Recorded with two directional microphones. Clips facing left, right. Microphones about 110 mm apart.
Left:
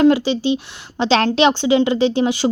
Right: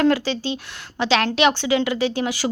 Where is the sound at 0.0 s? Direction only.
20° left (ahead or behind).